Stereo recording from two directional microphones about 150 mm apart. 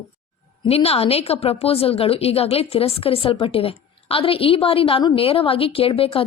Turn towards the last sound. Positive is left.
turn(degrees=35)  # may be behind; listen again after turning